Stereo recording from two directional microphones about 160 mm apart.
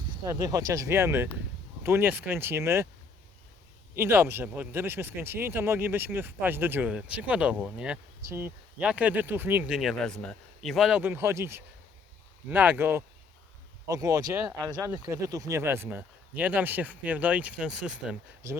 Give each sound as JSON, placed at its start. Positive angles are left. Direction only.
{"t": 0.3, "sound": "speech", "side_deg": -20}
{"t": 3.9, "sound": "speech", "side_deg": -15}
{"t": 11.0, "sound": "speech", "side_deg": -15}